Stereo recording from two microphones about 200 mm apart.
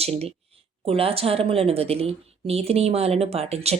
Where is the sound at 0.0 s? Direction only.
30° right (ahead or behind).